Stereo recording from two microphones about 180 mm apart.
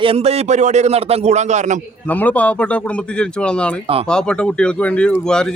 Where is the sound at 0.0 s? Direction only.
30° right (ahead or behind).